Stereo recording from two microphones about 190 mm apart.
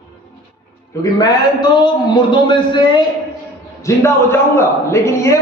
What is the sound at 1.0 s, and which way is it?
A man's voice, 20° left (ahead or behind).